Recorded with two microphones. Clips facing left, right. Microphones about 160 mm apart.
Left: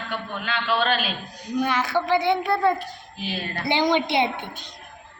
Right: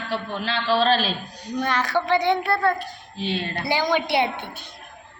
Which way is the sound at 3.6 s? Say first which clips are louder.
Left 2 dB; 20° left (ahead or behind).